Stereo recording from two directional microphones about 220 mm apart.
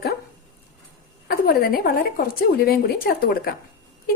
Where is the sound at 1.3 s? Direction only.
40° left (ahead or behind).